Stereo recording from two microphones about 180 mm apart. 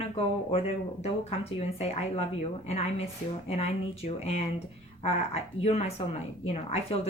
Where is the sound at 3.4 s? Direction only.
35° left (ahead or behind).